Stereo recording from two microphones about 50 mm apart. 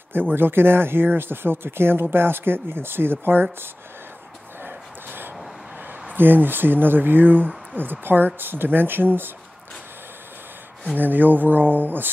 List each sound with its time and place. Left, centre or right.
0.1 s speech: right
4.6 s a sound: right
6.1 s speech: right
11.0 s speech: right